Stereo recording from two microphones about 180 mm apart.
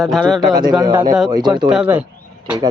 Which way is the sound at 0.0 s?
Centre (ahead or behind).